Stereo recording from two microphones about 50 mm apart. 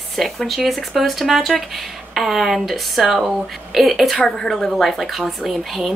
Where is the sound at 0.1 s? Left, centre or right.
Centre.